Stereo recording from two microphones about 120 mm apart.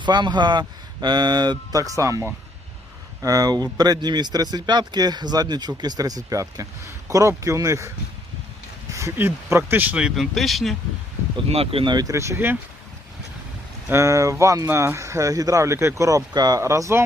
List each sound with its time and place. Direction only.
0.0 s speech: 40° right (ahead or behind); by 10.1 s 10° right (ahead or behind)
10.2 s speech: centre (ahead or behind)
11.4 s speech: 55° right (ahead or behind)
11.9 s speech: 25° right (ahead or behind)
13.9 s speech: 25° right (ahead or behind)